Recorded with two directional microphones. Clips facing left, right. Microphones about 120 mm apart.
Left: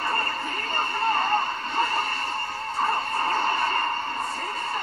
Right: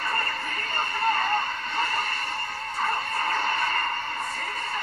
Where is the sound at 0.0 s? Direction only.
30° left (ahead or behind).